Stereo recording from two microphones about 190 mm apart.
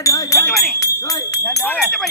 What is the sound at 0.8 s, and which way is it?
Speech, 20° left (ahead or behind).